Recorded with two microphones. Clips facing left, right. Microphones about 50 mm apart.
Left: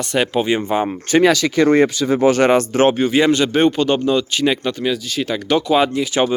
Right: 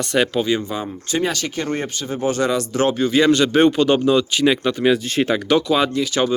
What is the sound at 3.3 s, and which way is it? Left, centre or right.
Speech, centre.